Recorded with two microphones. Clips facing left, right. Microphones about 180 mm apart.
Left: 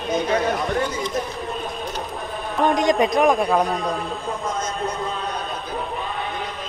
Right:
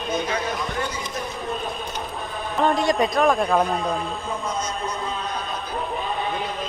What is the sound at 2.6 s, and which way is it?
A man's voice, 15° left (ahead or behind).